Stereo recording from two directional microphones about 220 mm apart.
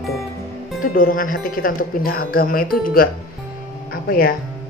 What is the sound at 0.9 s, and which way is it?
Speech, 40° left (ahead or behind).